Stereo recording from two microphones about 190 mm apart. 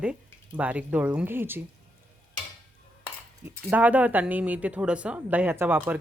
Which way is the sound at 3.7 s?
10° right (ahead or behind).